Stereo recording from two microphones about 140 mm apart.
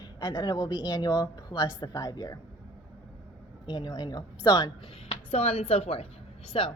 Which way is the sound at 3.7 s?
30° left (ahead or behind).